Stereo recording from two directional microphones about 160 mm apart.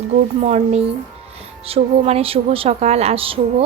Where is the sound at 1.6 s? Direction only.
40° right (ahead or behind).